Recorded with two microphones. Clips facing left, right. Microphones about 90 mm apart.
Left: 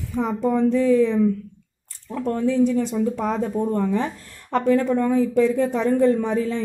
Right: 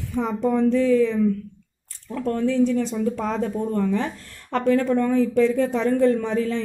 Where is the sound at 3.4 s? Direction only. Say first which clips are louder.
Left 1 dB; 25° left (ahead or behind).